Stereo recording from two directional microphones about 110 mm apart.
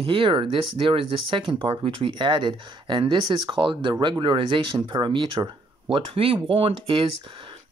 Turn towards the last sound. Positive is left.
turn(degrees=-50)  # may be behind; listen again after turning